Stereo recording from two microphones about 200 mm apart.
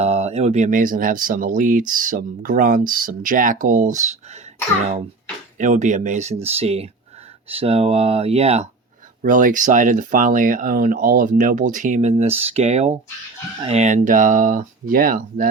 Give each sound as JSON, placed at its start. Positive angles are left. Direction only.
{"t": 0.0, "sound": "speech", "side_deg": -30}
{"t": 5.5, "sound": "speech", "side_deg": -40}
{"t": 9.2, "sound": "speech", "side_deg": -40}